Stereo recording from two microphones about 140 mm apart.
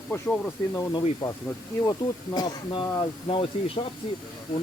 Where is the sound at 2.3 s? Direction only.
30° left (ahead or behind).